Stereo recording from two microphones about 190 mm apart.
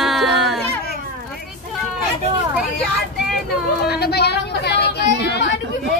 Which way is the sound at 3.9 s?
60° left (ahead or behind).